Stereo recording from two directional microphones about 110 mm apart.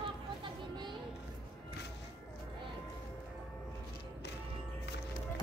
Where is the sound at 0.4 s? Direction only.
45° right (ahead or behind).